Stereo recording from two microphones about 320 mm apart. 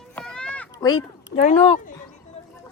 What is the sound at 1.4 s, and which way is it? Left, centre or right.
Speech, centre.